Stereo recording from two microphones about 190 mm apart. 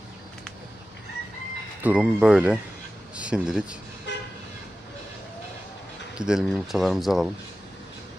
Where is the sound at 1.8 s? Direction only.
5° right (ahead or behind).